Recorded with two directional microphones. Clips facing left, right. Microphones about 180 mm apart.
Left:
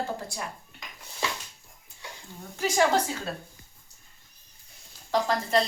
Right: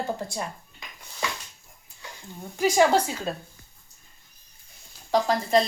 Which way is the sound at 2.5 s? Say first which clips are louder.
Right 5 dB; 15° right (ahead or behind).